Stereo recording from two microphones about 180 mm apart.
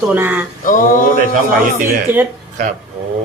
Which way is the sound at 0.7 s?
50° left (ahead or behind).